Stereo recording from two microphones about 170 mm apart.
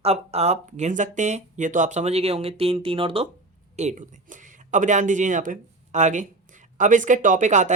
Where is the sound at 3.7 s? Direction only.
45° right (ahead or behind).